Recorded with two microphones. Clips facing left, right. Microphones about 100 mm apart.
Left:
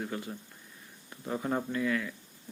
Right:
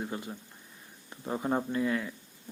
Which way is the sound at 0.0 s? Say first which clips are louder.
Even; 20° right (ahead or behind).